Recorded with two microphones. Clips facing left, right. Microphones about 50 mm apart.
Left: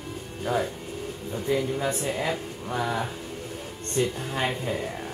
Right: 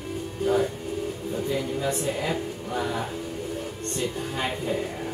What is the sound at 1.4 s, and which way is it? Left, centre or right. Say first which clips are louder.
Speech: left 3 dB; centre.